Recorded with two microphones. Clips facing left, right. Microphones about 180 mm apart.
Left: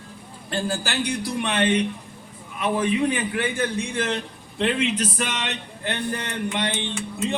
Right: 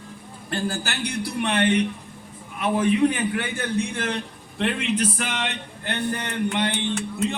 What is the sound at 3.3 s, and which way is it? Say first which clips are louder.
Speech: left 1 dB; 55° right (ahead or behind).